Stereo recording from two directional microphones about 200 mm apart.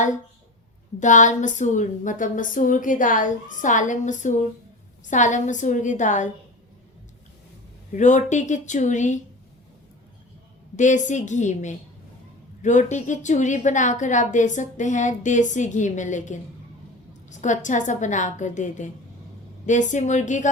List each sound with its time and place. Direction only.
0.9 s a woman's voice: 40° left (ahead or behind)
7.9 s a woman's voice: 35° left (ahead or behind)
10.8 s a woman's voice: 40° left (ahead or behind)